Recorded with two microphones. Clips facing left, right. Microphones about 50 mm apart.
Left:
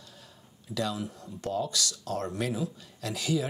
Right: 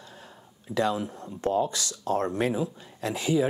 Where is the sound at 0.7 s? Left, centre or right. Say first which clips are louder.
Right 6 dB; right.